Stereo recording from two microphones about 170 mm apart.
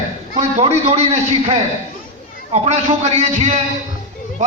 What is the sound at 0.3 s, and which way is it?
A man's voice, 40° right (ahead or behind).